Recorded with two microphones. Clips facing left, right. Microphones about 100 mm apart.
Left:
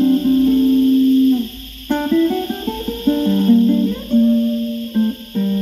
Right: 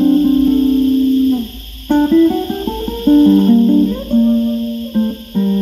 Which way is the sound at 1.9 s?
20° right (ahead or behind).